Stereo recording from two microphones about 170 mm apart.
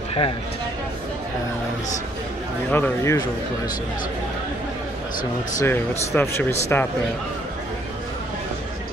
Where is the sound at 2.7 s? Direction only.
15° left (ahead or behind).